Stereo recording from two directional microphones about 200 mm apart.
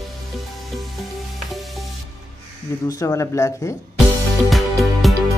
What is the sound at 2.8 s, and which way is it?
Speech, 15° left (ahead or behind).